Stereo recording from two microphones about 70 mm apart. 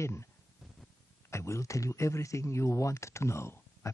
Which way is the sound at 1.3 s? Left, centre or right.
Left.